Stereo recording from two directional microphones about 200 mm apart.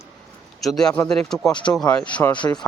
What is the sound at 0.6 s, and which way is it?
Speech, centre (ahead or behind).